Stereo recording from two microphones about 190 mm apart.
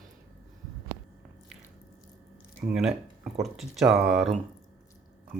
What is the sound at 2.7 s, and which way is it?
Speech, 5° right (ahead or behind).